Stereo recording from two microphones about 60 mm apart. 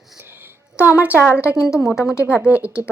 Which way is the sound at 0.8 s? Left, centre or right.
Right.